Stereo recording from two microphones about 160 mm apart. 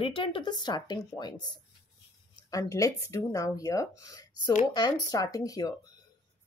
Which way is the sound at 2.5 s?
20° left (ahead or behind).